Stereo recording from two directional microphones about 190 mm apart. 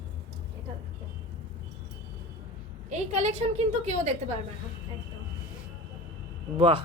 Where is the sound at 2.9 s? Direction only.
35° right (ahead or behind).